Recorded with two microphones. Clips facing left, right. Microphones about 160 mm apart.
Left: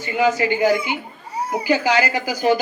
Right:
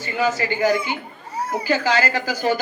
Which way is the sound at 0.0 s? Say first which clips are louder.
Left 3 dB; 15° left (ahead or behind).